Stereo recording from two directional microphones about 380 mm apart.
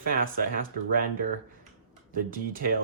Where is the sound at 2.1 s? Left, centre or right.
Right.